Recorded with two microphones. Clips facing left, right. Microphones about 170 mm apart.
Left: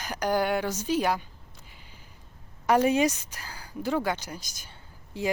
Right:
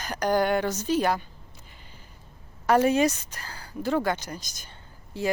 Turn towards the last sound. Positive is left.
turn(degrees=10)  # may be behind; listen again after turning